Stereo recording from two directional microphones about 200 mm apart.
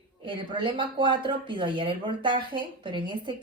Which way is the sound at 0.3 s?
25° right (ahead or behind).